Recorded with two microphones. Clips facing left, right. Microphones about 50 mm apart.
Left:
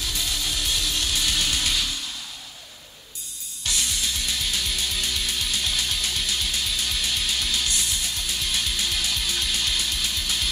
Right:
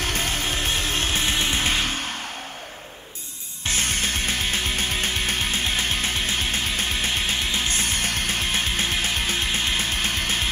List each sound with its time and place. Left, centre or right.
0.0 s music: right
3.6 s music: right